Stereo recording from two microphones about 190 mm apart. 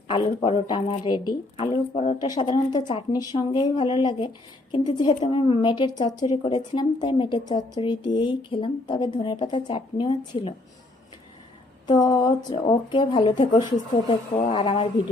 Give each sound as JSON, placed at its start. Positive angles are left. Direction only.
{"t": 0.1, "sound": "speech", "side_deg": 30}
{"t": 2.2, "sound": "speech", "side_deg": 20}
{"t": 11.9, "sound": "speech", "side_deg": 20}